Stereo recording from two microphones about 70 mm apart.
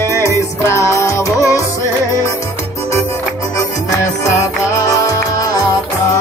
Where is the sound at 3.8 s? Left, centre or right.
Left.